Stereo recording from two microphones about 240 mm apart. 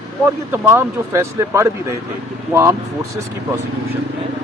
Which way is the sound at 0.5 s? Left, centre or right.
Centre.